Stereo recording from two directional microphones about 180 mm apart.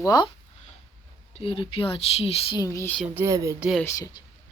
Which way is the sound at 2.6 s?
15° left (ahead or behind).